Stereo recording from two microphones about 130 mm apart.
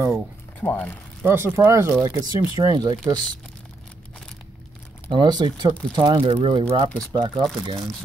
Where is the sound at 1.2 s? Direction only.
20° right (ahead or behind).